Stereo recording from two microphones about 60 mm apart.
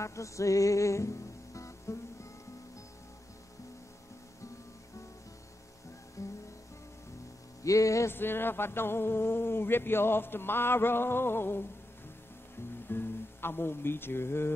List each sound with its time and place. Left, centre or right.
0.0 s music: left
6.2 s music: left
7.6 s a sound: left
8.1 s a man's voice: left
12.8 s speech: left